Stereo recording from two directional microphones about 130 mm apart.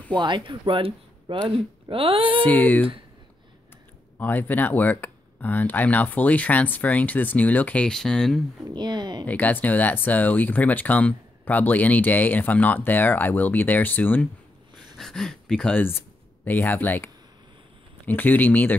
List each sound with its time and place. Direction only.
0.1 s speech: 35° right (ahead or behind)
2.4 s speech: 10° left (ahead or behind)
4.2 s speech: 15° left (ahead or behind)
8.6 s speech: 35° right (ahead or behind)
9.2 s speech: 10° left (ahead or behind)
15.0 s speech: 5° left (ahead or behind)